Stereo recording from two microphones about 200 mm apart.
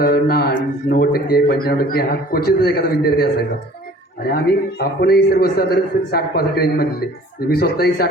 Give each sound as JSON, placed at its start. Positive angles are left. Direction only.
{"t": 0.0, "sound": "a man's voice", "side_deg": 50}